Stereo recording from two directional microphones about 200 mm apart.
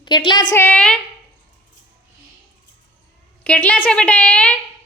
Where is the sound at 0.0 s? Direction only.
25° left (ahead or behind).